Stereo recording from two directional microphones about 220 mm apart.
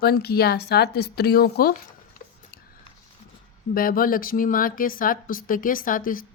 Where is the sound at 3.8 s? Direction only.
40° left (ahead or behind).